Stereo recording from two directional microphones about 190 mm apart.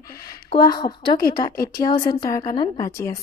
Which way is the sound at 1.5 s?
50° left (ahead or behind).